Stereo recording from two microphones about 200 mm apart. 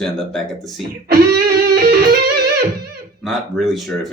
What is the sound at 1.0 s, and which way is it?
Music, 50° right (ahead or behind).